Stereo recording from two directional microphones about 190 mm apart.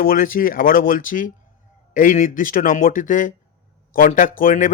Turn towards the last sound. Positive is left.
turn(degrees=45)  # may be behind; listen again after turning